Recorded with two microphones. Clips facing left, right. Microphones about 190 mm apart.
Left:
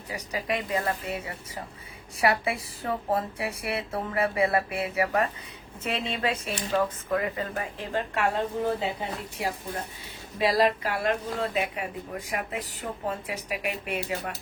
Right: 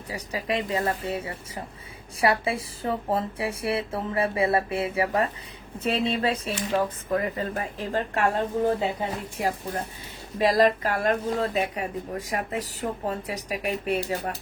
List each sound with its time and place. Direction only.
0.1 s speech: 30° right (ahead or behind)